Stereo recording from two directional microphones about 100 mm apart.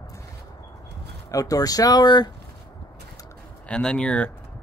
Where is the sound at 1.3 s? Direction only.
35° left (ahead or behind).